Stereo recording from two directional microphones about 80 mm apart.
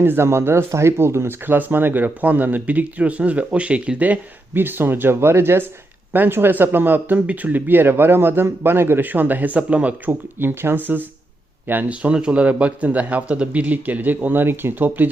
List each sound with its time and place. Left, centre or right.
0.0 s speech: right
10.1 s speech: right